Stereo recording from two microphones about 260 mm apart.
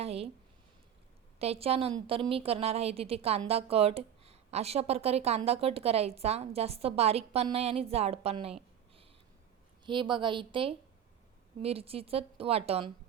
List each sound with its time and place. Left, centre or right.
0.0 s speech: right
1.4 s a woman's voice: right
9.8 s a woman's voice: centre